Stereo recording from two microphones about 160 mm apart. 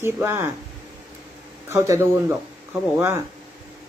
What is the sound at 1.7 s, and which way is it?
A woman's voice, 15° right (ahead or behind).